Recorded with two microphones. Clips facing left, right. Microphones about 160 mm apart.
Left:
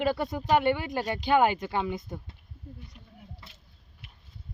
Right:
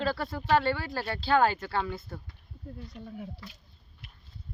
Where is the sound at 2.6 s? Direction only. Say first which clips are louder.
Right 4 dB; 75° right (ahead or behind).